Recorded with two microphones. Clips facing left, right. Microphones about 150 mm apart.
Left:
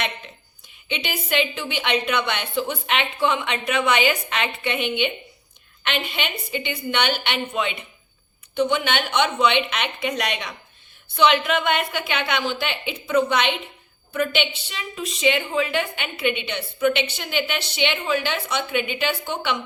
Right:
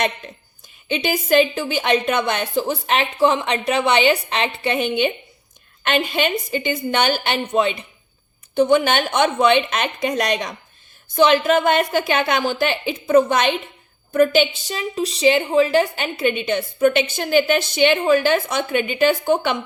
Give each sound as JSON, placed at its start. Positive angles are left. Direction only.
{"t": 0.9, "sound": "a woman's voice", "side_deg": -45}